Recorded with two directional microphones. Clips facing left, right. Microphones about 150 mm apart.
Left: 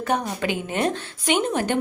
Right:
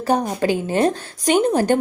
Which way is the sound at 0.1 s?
35° right (ahead or behind).